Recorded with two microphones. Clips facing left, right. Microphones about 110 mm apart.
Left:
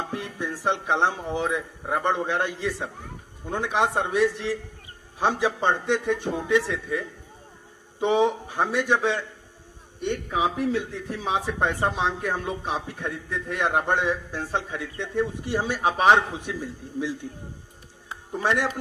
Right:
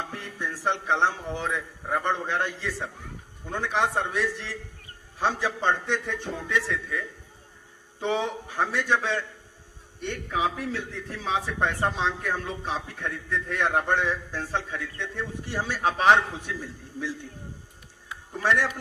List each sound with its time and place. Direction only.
0.1 s a man's voice: 15° left (ahead or behind)
18.3 s a man's voice: 15° left (ahead or behind)